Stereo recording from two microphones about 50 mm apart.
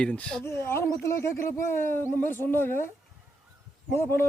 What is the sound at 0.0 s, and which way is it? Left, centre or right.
Speech, left.